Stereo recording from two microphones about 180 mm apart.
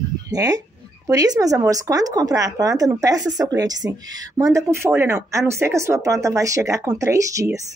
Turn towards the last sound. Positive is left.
turn(degrees=-15)  # may be behind; listen again after turning